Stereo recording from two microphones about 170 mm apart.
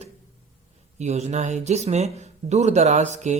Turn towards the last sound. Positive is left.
turn(degrees=-45)  # may be behind; listen again after turning